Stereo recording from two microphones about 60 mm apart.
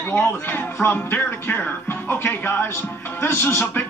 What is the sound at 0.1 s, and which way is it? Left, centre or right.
Speech, left.